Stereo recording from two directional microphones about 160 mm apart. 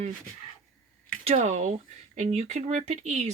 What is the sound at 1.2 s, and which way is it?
Speech, 45° right (ahead or behind).